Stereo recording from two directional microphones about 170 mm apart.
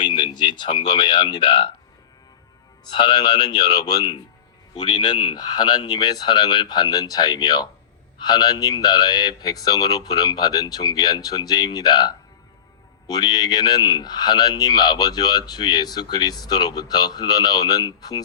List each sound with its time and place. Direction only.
0.0 s a sound: 30° left (ahead or behind)
0.5 s a man's voice: 25° left (ahead or behind)
2.9 s a man's voice: 25° left (ahead or behind)